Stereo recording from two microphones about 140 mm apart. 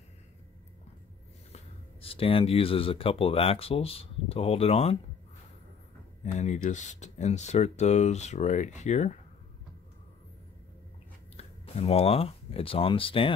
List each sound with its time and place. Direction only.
1.5 s speech: 40° left (ahead or behind)
6.3 s speech: 60° left (ahead or behind)
11.3 s speech: 45° left (ahead or behind)